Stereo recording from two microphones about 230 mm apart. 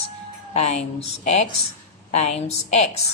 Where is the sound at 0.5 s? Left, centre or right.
Left.